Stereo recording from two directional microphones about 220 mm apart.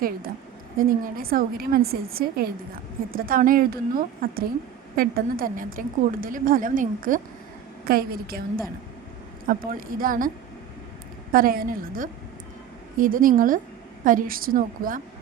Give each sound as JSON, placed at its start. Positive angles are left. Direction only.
{"t": 0.8, "sound": "a woman's voice", "side_deg": -40}